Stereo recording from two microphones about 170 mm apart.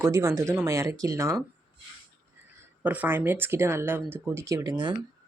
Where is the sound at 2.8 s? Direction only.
10° right (ahead or behind).